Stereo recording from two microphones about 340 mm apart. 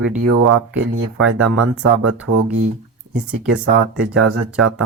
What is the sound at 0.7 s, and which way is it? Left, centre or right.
Speech, right.